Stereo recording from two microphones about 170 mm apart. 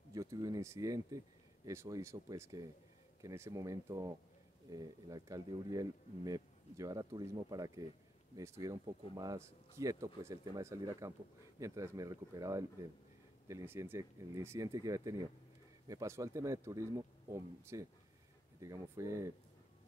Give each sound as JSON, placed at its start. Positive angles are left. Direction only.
{"t": 0.1, "sound": "speech", "side_deg": -20}